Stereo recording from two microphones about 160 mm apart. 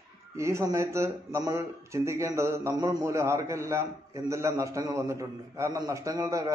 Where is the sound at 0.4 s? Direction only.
15° right (ahead or behind).